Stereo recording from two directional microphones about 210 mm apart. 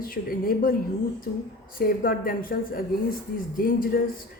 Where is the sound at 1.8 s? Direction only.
45° left (ahead or behind).